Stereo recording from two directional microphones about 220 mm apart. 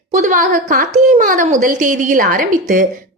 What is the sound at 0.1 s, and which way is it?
A woman's voice, 35° right (ahead or behind).